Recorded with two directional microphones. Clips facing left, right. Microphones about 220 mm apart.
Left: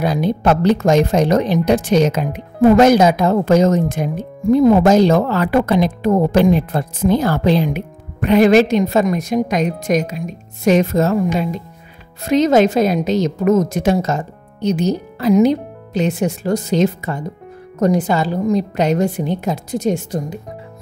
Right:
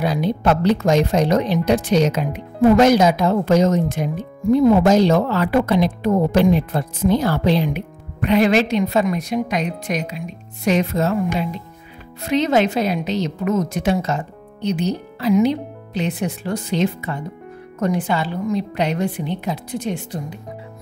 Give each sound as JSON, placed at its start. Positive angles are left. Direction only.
{"t": 0.0, "sound": "speech", "side_deg": 45}
{"t": 12.3, "sound": "speech", "side_deg": 45}